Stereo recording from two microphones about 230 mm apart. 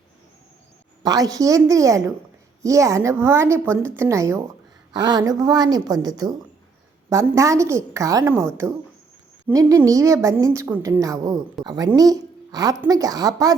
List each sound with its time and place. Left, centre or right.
1.0 s a woman's voice: centre
9.5 s a woman's voice: centre